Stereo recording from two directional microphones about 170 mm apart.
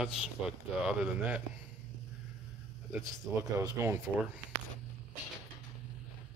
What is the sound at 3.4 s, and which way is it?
Speech, 20° right (ahead or behind).